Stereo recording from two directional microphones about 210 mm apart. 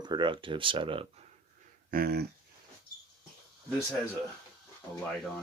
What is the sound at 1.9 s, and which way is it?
Speech, 45° right (ahead or behind).